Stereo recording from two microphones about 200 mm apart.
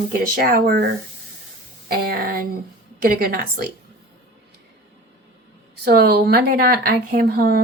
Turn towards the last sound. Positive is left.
turn(degrees=-50)  # may be behind; listen again after turning